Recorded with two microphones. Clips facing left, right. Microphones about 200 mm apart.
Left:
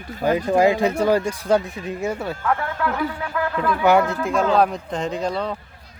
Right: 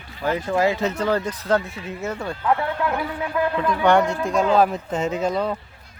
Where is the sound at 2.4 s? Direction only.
20° right (ahead or behind).